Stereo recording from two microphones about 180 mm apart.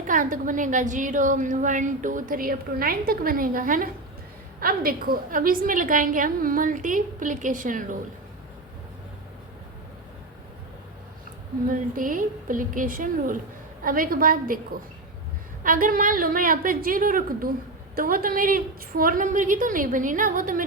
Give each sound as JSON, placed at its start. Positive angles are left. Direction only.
{"t": 0.1, "sound": "a woman's voice", "side_deg": -50}
{"t": 11.7, "sound": "a woman's voice", "side_deg": -50}